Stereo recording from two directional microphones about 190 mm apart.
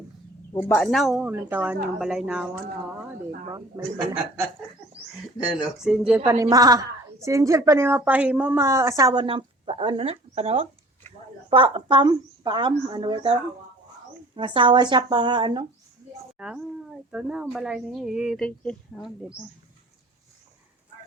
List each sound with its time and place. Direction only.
0.6 s a woman's voice: 10° left (ahead or behind)
5.8 s a woman's voice: 5° right (ahead or behind); by 15.6 s 25° right (ahead or behind)
16.4 s a woman's voice: 5° right (ahead or behind)